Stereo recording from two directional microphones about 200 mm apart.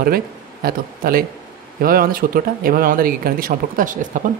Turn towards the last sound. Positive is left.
turn(degrees=-40)  # may be behind; listen again after turning